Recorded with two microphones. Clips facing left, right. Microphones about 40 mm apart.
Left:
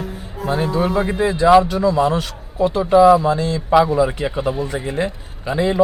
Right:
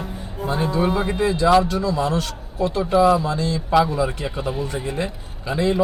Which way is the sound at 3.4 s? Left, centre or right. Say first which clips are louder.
Left 3 dB; left.